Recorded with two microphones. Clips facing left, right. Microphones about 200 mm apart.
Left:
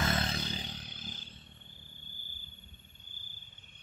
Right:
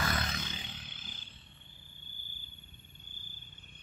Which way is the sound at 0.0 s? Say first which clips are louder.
Left 3 dB; 25° left (ahead or behind).